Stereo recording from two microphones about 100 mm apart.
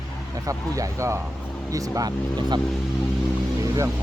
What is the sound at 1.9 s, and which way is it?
Speech, 45° right (ahead or behind).